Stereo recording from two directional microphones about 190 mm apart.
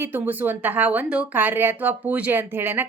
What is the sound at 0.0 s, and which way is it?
Speech, 10° right (ahead or behind).